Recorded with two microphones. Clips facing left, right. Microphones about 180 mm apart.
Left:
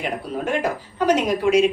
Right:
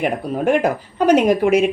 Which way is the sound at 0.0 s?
55° right (ahead or behind).